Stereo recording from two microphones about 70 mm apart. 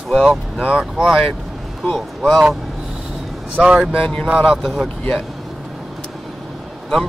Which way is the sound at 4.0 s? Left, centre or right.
Centre.